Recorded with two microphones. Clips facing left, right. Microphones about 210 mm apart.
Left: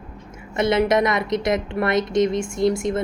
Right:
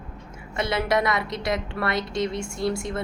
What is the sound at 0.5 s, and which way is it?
A woman's voice, 20° left (ahead or behind).